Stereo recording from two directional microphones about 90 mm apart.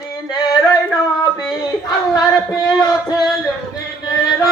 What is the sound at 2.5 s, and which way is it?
Music, 5° left (ahead or behind).